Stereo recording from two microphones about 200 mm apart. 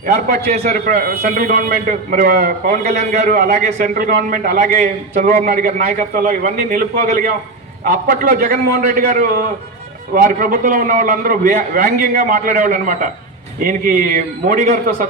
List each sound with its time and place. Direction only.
0.0 s a man's voice: 50° right (ahead or behind)
2.8 s a man's voice: 35° right (ahead or behind)
3.2 s a man's voice: 50° right (ahead or behind)